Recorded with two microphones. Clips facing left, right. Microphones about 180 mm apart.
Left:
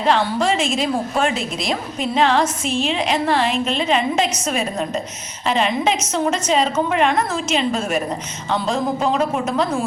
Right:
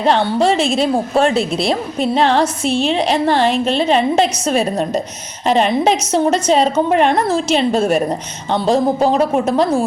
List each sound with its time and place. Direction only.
0.0 s a woman's voice: 30° right (ahead or behind)